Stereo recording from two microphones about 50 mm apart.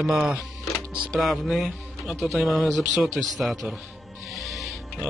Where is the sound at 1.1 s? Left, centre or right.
Centre.